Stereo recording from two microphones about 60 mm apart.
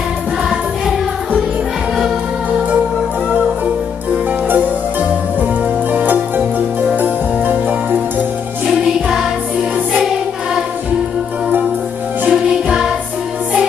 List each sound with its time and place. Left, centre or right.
5.9 s music: right
12.3 s music: centre